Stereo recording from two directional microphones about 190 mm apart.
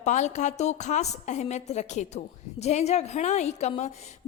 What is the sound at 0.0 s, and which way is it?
A woman's voice, 40° left (ahead or behind).